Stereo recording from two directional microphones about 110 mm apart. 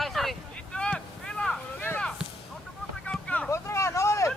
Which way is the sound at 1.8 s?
20° left (ahead or behind).